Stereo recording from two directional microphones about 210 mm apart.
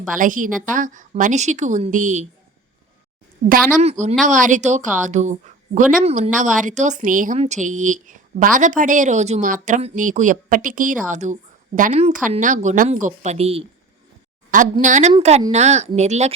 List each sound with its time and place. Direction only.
0.1 s speech: 40° right (ahead or behind)
3.5 s a woman's voice: 35° right (ahead or behind)